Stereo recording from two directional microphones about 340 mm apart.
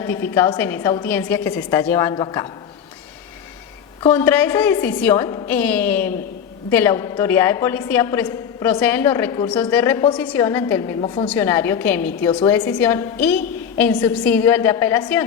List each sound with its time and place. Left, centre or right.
0.0 s a woman's voice: centre
4.0 s a woman's voice: centre